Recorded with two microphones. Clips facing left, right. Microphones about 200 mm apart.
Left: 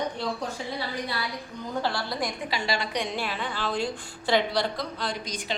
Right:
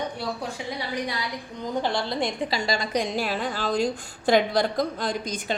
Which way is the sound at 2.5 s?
45° right (ahead or behind).